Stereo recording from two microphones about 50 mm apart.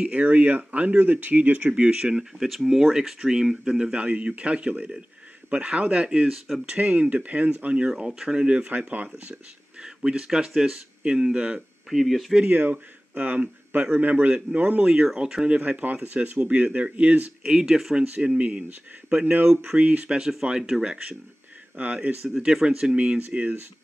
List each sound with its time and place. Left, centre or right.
0.0 s speech: right
1.7 s speech: centre
2.3 s speech: centre
3.9 s speech: right
9.3 s speech: centre
11.9 s speech: centre
12.5 s speech: right
15.1 s speech: centre; by 17.3 s right
17.4 s speech: centre
18.0 s speech: right
20.2 s speech: centre
21.7 s speech: right
22.4 s speech: centre
22.9 s speech: right